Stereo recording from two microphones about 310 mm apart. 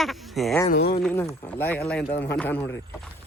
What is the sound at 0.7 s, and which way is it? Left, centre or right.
Speech, left.